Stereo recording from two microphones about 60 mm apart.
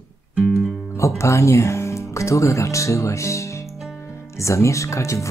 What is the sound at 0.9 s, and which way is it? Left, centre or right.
Speech, left.